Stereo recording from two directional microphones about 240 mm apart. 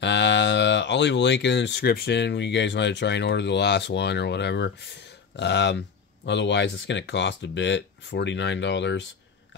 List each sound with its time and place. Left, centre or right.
0.0 s speech: left